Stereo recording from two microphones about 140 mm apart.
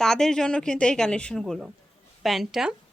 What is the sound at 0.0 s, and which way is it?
Speech, 5° left (ahead or behind).